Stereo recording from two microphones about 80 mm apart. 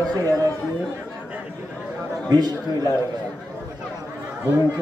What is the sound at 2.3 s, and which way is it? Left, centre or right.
Speech, right.